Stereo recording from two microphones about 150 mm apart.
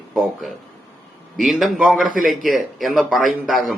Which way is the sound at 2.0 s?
65° right (ahead or behind).